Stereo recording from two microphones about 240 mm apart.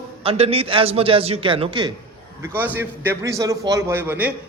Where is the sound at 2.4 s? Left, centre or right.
Centre.